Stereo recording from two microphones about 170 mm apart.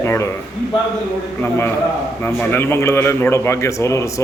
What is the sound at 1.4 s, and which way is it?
A man's voice, 10° left (ahead or behind).